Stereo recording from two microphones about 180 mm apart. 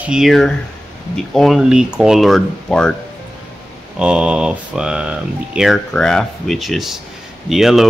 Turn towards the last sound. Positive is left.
turn(degrees=0)  # may be behind; listen again after turning